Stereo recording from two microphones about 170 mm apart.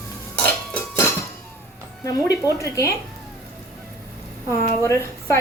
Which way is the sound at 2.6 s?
20° left (ahead or behind).